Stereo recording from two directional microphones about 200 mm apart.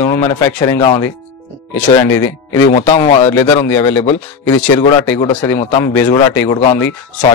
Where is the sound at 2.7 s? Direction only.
30° left (ahead or behind).